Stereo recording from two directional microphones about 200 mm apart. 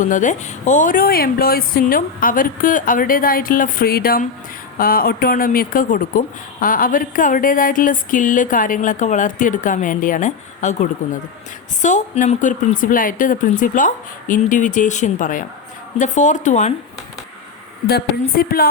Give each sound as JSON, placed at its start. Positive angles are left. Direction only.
{"t": 0.0, "sound": "a woman's voice", "side_deg": 40}
{"t": 17.8, "sound": "a woman's voice", "side_deg": 50}